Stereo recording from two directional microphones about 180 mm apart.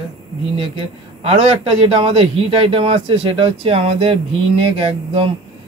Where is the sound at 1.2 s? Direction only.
35° right (ahead or behind).